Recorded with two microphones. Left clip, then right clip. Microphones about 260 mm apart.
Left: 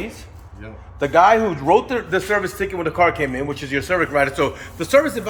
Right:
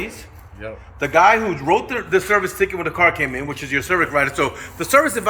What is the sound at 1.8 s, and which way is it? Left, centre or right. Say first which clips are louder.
A man's voice: right 2 dB; centre.